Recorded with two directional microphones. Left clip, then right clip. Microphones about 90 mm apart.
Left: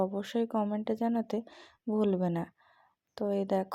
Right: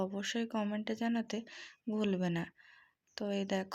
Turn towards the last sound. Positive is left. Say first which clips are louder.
# left 6 dB
turn(degrees=50)  # may be behind; listen again after turning